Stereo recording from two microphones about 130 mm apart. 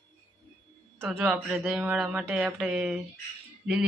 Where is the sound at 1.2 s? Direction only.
20° right (ahead or behind).